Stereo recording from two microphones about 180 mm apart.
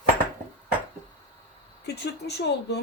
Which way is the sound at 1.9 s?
65° left (ahead or behind).